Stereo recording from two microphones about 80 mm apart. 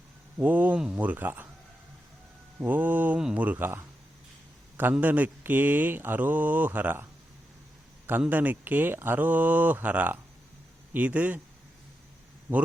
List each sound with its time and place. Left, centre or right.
0.3 s speech: right
2.6 s speech: right
8.3 s speech: right